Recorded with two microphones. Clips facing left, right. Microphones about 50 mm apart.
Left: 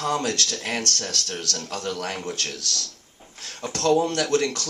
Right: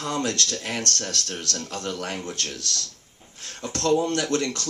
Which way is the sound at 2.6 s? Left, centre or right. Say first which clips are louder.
Left 1 dB; right.